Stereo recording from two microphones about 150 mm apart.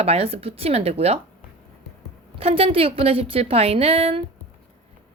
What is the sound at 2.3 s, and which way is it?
A woman's voice, 40° right (ahead or behind).